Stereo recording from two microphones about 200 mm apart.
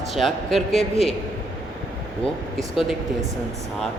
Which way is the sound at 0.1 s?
Centre (ahead or behind).